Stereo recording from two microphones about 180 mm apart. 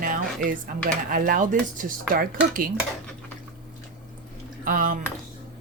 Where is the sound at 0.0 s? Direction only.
50° right (ahead or behind).